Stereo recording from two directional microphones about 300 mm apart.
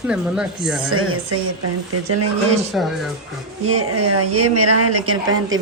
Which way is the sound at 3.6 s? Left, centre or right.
Right.